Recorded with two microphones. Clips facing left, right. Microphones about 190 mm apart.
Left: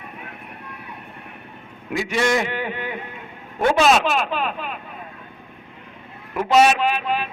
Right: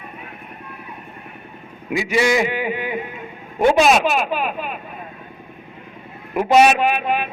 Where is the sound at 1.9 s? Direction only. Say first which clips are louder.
Right 3 dB; 5° right (ahead or behind).